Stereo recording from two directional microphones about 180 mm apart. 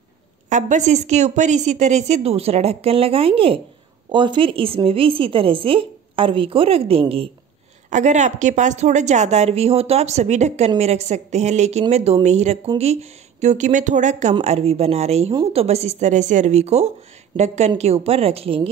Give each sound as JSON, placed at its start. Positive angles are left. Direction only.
{"t": 0.5, "sound": "a woman's voice", "side_deg": -40}